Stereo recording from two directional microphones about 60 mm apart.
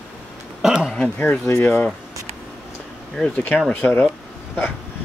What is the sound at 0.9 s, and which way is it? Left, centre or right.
Speech, centre.